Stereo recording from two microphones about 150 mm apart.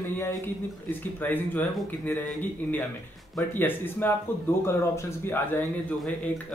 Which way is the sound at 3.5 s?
15° left (ahead or behind).